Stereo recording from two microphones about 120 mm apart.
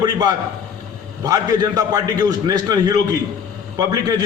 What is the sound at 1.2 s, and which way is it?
A man's voice, 30° right (ahead or behind).